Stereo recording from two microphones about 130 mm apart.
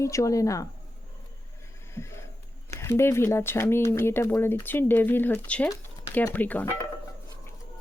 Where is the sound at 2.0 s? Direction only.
20° left (ahead or behind).